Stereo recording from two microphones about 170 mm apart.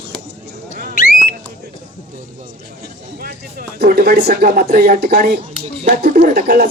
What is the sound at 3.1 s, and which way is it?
Speech, 60° right (ahead or behind).